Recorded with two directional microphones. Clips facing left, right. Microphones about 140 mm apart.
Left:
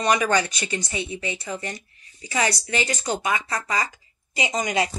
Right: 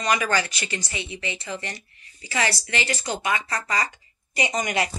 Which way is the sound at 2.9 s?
15° left (ahead or behind).